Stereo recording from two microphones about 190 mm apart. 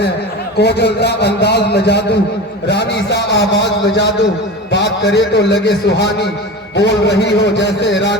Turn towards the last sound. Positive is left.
turn(degrees=65)  # may be behind; listen again after turning